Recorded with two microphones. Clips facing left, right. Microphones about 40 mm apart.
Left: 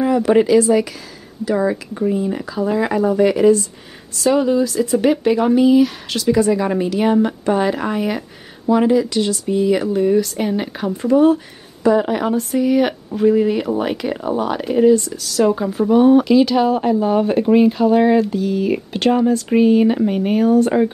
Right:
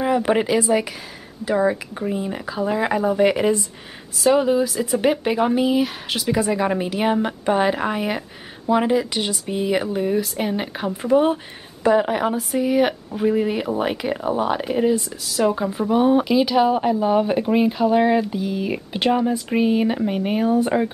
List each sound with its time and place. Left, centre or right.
0.0 s speech: centre
11.1 s speech: right
12.0 s speech: centre